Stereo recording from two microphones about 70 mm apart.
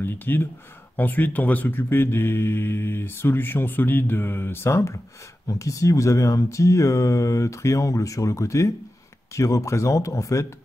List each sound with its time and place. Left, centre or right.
0.0 s speech: left
5.5 s speech: left